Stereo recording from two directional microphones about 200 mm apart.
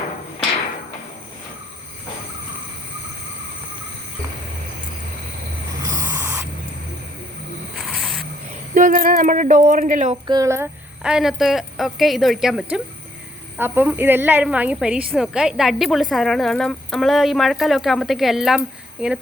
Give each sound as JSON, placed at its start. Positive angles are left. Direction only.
{"t": 5.8, "sound": "a sound", "side_deg": -15}
{"t": 7.8, "sound": "vehicle", "side_deg": 0}
{"t": 8.7, "sound": "speech", "side_deg": -40}
{"t": 10.2, "sound": "a woman's voice", "side_deg": -20}